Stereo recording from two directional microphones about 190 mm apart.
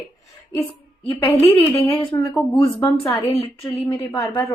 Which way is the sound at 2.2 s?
20° left (ahead or behind).